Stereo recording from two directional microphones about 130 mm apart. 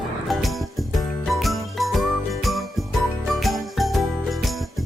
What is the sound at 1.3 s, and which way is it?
Jingle, centre (ahead or behind).